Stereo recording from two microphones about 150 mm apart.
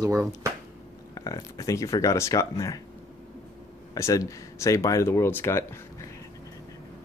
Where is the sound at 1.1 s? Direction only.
20° left (ahead or behind).